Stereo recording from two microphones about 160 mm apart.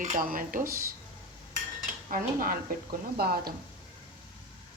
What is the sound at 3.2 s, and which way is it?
Speech, 75° right (ahead or behind).